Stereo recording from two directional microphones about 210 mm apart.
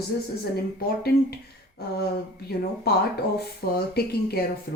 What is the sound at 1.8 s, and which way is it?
Speech, 50° left (ahead or behind).